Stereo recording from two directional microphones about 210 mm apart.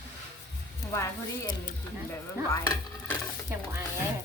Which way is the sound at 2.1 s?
10° left (ahead or behind).